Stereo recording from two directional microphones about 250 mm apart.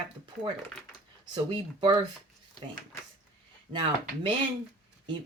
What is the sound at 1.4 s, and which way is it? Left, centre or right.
Speech, centre.